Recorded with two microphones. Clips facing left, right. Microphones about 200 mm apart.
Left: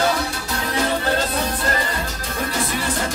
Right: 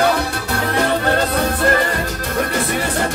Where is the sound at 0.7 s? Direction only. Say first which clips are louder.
Right 3 dB; 60° right (ahead or behind).